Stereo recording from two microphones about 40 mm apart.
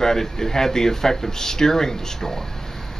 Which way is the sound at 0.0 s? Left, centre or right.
Centre.